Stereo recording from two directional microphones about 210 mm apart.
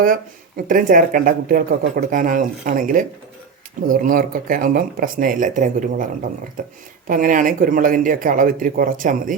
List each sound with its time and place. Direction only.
0.0 s speech: 40° right (ahead or behind)
7.1 s speech: 40° right (ahead or behind)